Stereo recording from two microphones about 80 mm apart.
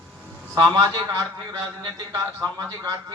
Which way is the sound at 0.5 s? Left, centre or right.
Right.